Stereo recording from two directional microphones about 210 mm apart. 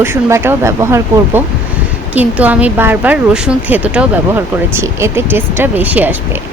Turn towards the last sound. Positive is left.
turn(degrees=-10)  # may be behind; listen again after turning